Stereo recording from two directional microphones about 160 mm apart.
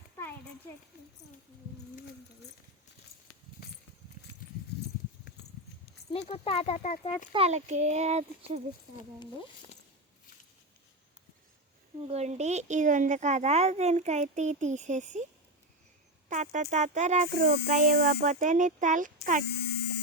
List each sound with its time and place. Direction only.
6.1 s speech: 40° left (ahead or behind)
7.3 s speech: 45° right (ahead or behind)
12.0 s speech: 40° right (ahead or behind)
16.3 s speech: 50° right (ahead or behind)